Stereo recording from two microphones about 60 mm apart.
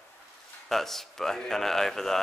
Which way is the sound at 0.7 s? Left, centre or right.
Centre.